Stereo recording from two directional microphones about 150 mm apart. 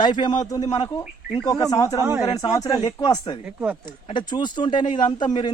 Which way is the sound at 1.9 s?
15° right (ahead or behind).